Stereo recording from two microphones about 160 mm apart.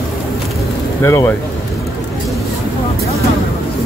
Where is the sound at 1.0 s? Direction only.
15° left (ahead or behind).